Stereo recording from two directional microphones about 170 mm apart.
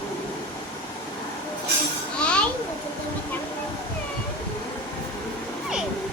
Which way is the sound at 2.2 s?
5° left (ahead or behind).